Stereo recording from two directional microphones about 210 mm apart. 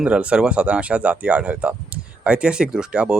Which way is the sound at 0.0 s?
5° right (ahead or behind).